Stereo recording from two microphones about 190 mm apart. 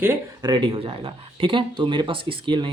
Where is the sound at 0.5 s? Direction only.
25° right (ahead or behind).